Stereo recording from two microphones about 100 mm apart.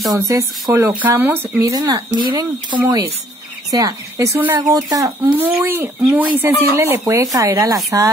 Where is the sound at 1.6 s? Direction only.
35° right (ahead or behind).